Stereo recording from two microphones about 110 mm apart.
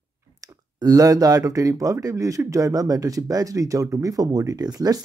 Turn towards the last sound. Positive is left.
turn(degrees=-35)  # may be behind; listen again after turning